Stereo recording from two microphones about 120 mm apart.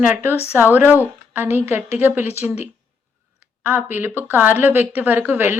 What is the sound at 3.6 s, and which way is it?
A woman's voice, 15° right (ahead or behind).